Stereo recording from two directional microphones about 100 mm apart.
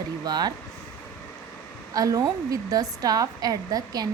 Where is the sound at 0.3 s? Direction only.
40° right (ahead or behind).